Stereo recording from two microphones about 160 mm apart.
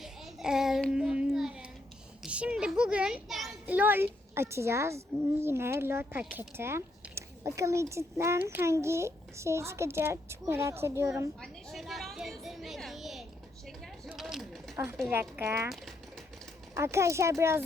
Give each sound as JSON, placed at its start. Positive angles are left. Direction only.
{"t": 0.0, "sound": "child singing", "side_deg": 0}
{"t": 2.2, "sound": "a sound", "side_deg": -5}
{"t": 3.8, "sound": "speech", "side_deg": -10}
{"t": 11.3, "sound": "a sound", "side_deg": 0}
{"t": 15.1, "sound": "speech", "side_deg": -10}
{"t": 16.7, "sound": "speech", "side_deg": -15}